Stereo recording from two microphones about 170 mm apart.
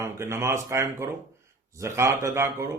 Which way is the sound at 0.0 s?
15° right (ahead or behind).